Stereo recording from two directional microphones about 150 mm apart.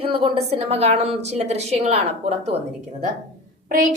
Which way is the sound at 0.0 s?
35° right (ahead or behind).